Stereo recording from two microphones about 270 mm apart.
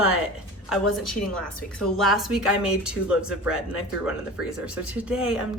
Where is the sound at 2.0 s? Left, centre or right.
Centre.